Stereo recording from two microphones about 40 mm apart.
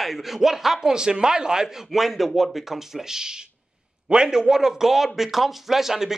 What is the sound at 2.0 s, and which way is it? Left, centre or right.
A man's voice, centre.